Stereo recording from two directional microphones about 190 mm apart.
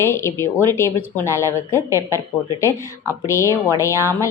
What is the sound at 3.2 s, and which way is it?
A woman's voice, 15° left (ahead or behind).